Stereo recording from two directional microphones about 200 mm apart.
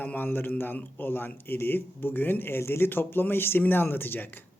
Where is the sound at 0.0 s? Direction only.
10° left (ahead or behind).